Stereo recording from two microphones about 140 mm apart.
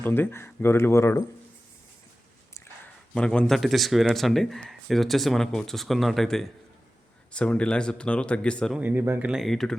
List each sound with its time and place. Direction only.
0.0 s speech: 15° left (ahead or behind)
3.2 s speech: 5° left (ahead or behind)
8.7 s speech: 10° right (ahead or behind)